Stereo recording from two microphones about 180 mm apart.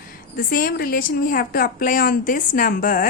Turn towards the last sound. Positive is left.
turn(degrees=50)  # may be behind; listen again after turning